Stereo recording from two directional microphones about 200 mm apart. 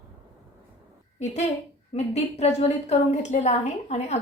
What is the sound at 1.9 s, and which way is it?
A woman's voice, 30° left (ahead or behind).